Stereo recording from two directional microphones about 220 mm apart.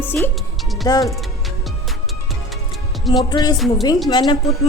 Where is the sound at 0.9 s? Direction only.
15° left (ahead or behind).